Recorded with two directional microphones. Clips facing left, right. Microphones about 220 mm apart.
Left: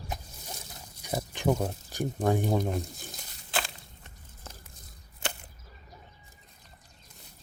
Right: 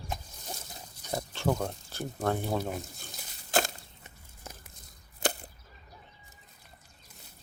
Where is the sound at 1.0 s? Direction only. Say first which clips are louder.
Left 2 dB; 15° left (ahead or behind).